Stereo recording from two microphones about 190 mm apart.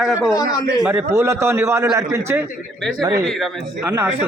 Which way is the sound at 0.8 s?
15° right (ahead or behind).